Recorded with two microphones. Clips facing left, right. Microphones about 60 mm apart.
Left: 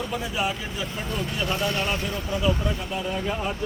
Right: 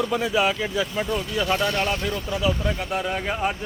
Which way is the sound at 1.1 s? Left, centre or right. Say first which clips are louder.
Right 4 dB; right.